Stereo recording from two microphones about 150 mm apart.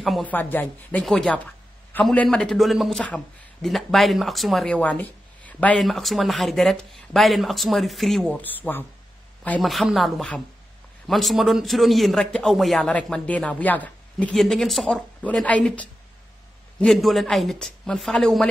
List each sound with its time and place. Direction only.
0.0 s speech: centre (ahead or behind)
0.3 s speech: 10° left (ahead or behind)